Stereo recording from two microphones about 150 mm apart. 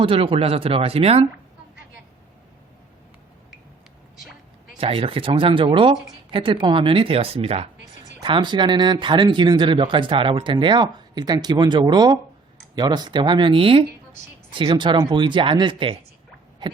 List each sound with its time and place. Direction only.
0.0 s speech: 35° right (ahead or behind)
4.8 s speech: 35° right (ahead or behind)
8.2 s speech: 30° right (ahead or behind)